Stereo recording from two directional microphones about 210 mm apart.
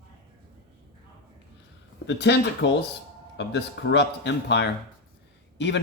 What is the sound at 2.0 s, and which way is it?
Speech, 55° left (ahead or behind).